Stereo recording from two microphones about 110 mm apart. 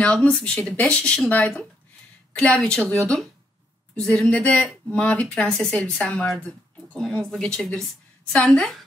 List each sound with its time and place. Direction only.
0.0 s a woman's voice: 10° left (ahead or behind)